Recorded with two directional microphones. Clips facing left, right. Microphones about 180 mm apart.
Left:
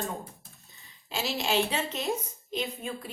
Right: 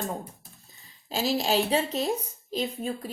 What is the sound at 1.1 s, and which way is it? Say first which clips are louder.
A woman's voice: right 4 dB; 40° right (ahead or behind).